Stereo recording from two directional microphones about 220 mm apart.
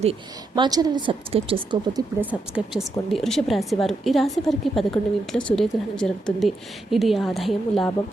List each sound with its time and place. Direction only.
0.0 s a woman's voice: 25° right (ahead or behind)
3.1 s a woman's voice: centre (ahead or behind)